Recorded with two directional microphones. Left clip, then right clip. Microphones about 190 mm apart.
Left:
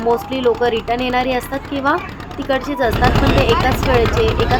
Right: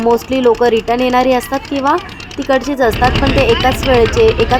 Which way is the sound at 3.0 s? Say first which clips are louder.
Right 3 dB; 55° left (ahead or behind).